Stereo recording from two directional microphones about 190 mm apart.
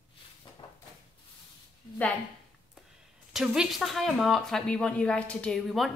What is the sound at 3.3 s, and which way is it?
Speech, centre (ahead or behind).